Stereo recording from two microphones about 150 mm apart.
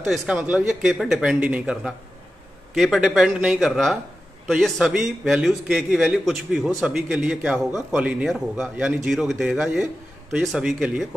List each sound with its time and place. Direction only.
0.0 s a man's voice: centre (ahead or behind)